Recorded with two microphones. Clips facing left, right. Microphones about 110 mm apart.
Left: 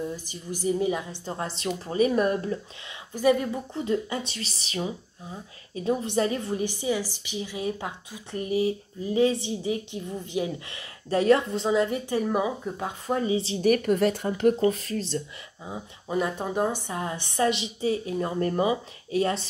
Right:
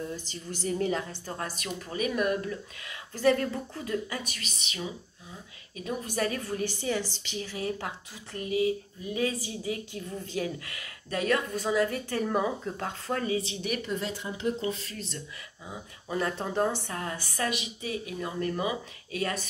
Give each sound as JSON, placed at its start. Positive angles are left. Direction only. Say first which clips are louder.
{"t": 0.1, "sound": "a woman's voice", "louder": "left 3 dB", "side_deg": 15}
{"t": 3.1, "sound": "speech", "louder": "left 2 dB", "side_deg": 15}
{"t": 3.8, "sound": "a woman's voice", "louder": "left 6 dB", "side_deg": 25}
{"t": 11.1, "sound": "speech", "louder": "left 7 dB", "side_deg": 30}
{"t": 13.4, "sound": "speech", "louder": "left 11 dB", "side_deg": 40}
{"t": 13.8, "sound": "speech", "louder": "left 10 dB", "side_deg": 60}
{"t": 14.6, "sound": "a woman's voice", "louder": "left 9 dB", "side_deg": 45}